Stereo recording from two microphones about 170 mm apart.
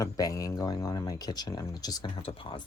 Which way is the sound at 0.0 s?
20° left (ahead or behind).